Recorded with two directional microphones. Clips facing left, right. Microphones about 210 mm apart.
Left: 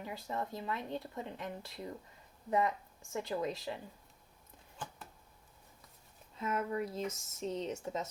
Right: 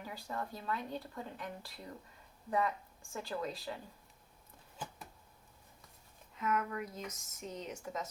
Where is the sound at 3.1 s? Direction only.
20° left (ahead or behind).